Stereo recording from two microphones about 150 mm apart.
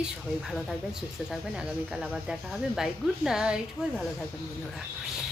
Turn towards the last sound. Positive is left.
turn(degrees=-5)  # may be behind; listen again after turning